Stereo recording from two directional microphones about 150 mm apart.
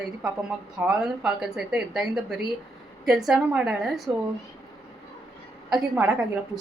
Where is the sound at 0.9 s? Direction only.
10° right (ahead or behind).